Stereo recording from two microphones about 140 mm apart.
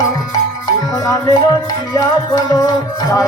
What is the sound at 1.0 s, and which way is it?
Music, 25° left (ahead or behind).